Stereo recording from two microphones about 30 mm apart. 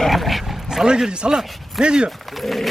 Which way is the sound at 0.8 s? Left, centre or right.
Right.